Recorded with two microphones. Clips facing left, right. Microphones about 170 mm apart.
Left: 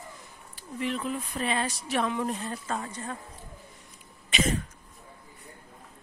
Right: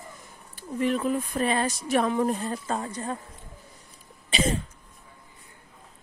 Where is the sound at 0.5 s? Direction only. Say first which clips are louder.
Right 6 dB; 45° right (ahead or behind).